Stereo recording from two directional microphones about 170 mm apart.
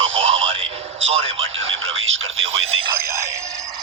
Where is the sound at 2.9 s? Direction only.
15° right (ahead or behind).